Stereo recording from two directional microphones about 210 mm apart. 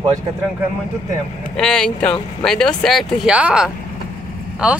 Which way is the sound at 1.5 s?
5° left (ahead or behind).